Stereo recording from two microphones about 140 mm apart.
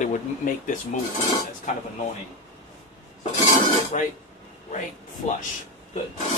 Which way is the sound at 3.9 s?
65° left (ahead or behind).